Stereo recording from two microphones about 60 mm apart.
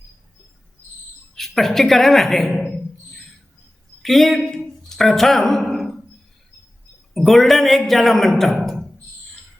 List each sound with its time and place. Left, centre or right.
1.4 s a woman's voice: centre
4.0 s speech: centre
7.1 s a man's voice: centre